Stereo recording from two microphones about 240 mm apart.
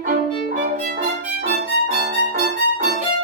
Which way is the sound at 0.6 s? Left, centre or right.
Right.